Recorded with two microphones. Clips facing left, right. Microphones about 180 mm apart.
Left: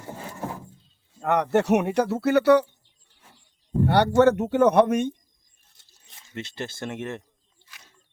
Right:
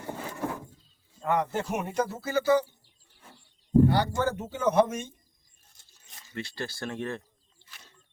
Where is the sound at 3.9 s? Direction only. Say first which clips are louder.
Left 9 dB; 70° left (ahead or behind).